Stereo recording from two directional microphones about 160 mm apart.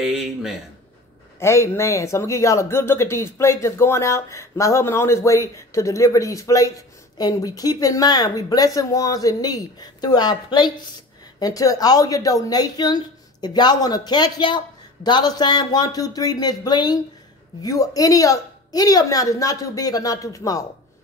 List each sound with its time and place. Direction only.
1.4 s speech: 15° left (ahead or behind)